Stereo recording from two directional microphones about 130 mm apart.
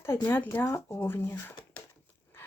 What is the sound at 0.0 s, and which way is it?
Speech, 20° left (ahead or behind).